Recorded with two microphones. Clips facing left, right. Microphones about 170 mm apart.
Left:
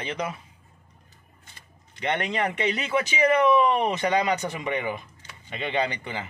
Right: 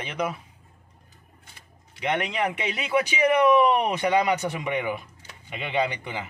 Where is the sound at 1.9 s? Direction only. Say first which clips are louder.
Even; 5° right (ahead or behind).